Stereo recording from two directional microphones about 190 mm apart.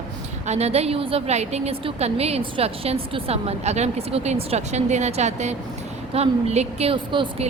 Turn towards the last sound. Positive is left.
turn(degrees=-25)  # may be behind; listen again after turning